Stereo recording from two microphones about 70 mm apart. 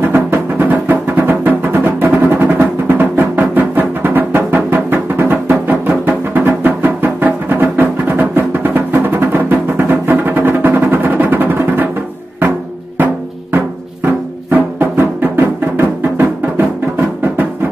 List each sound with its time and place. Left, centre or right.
0.0 s music: right